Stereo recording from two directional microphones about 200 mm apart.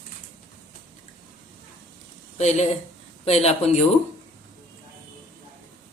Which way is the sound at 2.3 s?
35° left (ahead or behind).